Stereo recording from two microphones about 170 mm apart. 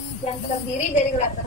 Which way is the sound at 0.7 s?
45° left (ahead or behind).